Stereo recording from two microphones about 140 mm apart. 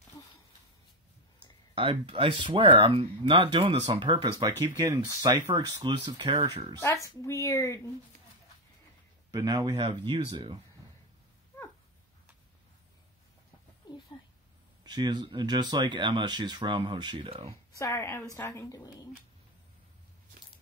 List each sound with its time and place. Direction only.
1.8 s speech: 40° right (ahead or behind)
6.8 s a child's voice: 20° left (ahead or behind)
9.3 s speech: 25° right (ahead or behind)
13.9 s a sound: 30° left (ahead or behind)
14.8 s speech: 30° right (ahead or behind)
17.7 s a child's voice: 20° left (ahead or behind)